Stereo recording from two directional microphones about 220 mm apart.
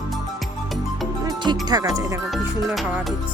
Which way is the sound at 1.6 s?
15° right (ahead or behind).